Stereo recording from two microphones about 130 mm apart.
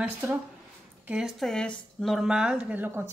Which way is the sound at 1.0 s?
5° right (ahead or behind).